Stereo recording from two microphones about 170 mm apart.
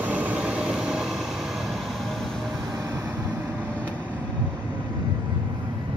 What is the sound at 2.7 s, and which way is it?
Vehicle, 15° right (ahead or behind).